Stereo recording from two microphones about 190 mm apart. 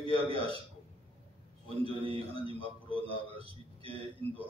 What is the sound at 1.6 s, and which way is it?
A man's voice, 30° right (ahead or behind).